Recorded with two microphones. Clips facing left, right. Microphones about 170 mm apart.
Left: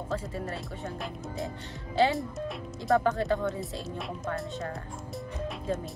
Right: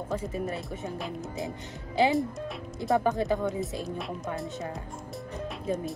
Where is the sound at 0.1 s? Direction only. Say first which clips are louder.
Right 3 dB; 15° right (ahead or behind).